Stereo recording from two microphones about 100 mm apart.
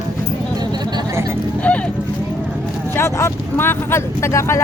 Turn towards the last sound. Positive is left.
turn(degrees=30)  # may be behind; listen again after turning